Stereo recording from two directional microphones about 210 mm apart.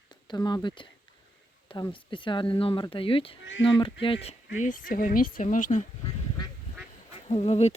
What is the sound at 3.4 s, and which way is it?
Speech, 65° left (ahead or behind).